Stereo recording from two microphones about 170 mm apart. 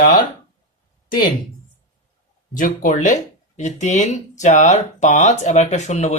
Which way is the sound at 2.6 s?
50° left (ahead or behind).